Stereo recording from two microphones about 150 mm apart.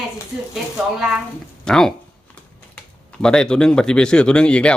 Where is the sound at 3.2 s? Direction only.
5° left (ahead or behind).